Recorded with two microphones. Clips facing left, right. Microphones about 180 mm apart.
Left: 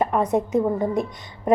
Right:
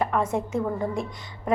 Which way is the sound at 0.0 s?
20° left (ahead or behind).